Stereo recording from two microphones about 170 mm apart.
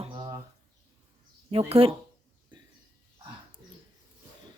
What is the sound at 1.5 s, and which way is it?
Speech, 35° right (ahead or behind).